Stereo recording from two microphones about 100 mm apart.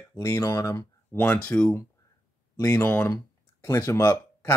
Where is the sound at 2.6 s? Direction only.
25° left (ahead or behind).